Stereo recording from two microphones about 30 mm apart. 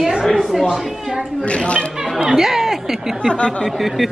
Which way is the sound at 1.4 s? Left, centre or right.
Left.